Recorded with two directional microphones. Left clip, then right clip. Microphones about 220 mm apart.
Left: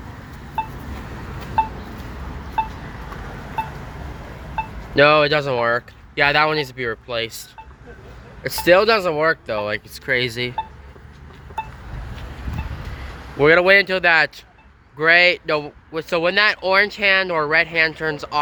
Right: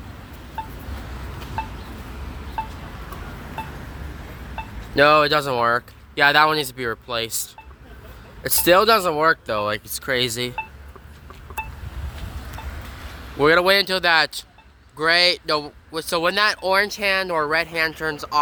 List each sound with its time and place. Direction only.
0.6 s a sound: 20° left (ahead or behind)
4.9 s speech: 10° right (ahead or behind)
8.4 s speech: 20° right (ahead or behind)
13.4 s speech: 10° right (ahead or behind)